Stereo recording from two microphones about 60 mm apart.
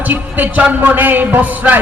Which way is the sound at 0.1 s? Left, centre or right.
Right.